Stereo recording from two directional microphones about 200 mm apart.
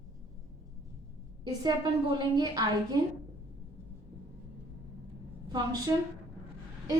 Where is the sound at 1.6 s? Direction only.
20° right (ahead or behind).